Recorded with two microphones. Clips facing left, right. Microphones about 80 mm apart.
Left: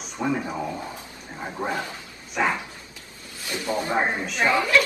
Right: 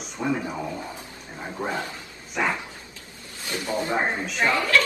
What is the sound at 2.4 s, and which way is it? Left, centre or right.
Speech, centre.